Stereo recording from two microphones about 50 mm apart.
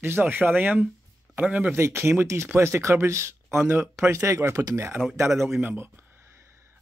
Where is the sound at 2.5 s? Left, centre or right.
Right.